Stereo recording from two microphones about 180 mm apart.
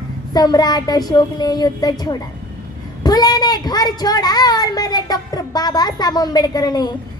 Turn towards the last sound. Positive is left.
turn(degrees=20)  # may be behind; listen again after turning